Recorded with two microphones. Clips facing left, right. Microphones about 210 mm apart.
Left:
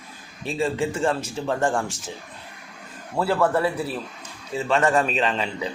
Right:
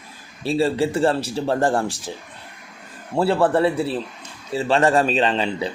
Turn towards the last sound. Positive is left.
turn(degrees=-30)  # may be behind; listen again after turning